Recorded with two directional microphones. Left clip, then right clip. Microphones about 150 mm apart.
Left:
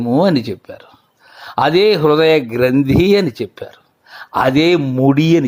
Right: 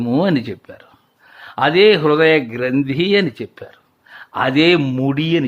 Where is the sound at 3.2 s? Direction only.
20° left (ahead or behind).